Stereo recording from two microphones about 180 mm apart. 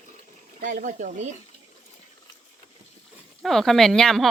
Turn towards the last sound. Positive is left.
turn(degrees=5)  # may be behind; listen again after turning